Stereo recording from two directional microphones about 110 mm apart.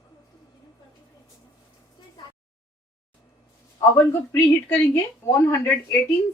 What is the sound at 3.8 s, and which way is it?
A woman's voice, 25° left (ahead or behind).